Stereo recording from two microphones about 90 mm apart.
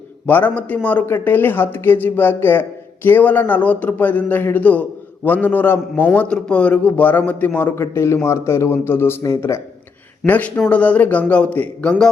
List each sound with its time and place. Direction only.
0.3 s a man's voice: 20° left (ahead or behind)
6.1 s a man's voice: 10° left (ahead or behind); by 9.6 s 30° left (ahead or behind)
10.2 s a man's voice: 20° left (ahead or behind)